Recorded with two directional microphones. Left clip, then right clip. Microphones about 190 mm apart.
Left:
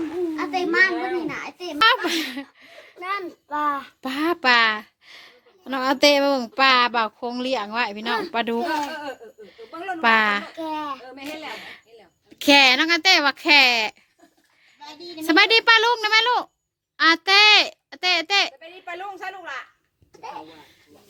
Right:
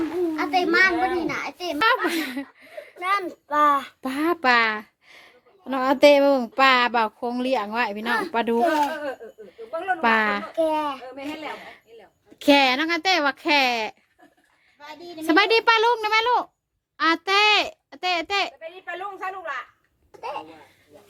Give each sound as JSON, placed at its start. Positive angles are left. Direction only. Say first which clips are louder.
{"t": 0.0, "sound": "a sound", "louder": "right 1 dB", "side_deg": -5}
{"t": 1.8, "sound": "a woman's voice", "louder": "left 3 dB", "side_deg": 0}
{"t": 10.6, "sound": "a child's voice", "louder": "right 6 dB", "side_deg": -10}
{"t": 11.5, "sound": "a woman's voice", "louder": "left 2 dB", "side_deg": 5}
{"t": 15.1, "sound": "a woman's voice", "louder": "left 2 dB", "side_deg": 0}